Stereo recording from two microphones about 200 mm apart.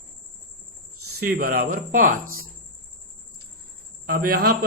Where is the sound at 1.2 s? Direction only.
50° right (ahead or behind).